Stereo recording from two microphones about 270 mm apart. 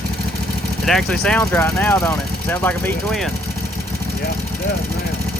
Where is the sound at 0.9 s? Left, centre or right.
Centre.